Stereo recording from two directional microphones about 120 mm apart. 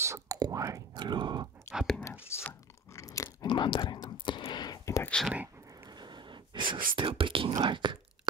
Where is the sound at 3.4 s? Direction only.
40° left (ahead or behind).